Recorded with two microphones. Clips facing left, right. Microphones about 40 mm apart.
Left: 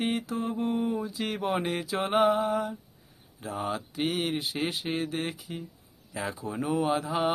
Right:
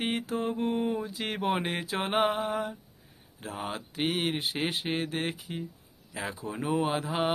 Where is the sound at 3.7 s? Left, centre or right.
Right.